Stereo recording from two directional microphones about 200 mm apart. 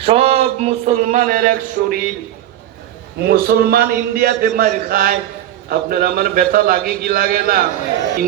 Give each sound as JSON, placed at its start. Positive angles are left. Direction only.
{"t": 0.0, "sound": "speech", "side_deg": -30}
{"t": 3.2, "sound": "a man's voice", "side_deg": -50}